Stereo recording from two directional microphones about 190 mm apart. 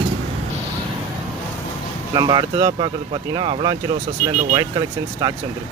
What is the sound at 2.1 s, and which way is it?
Speech, 25° right (ahead or behind).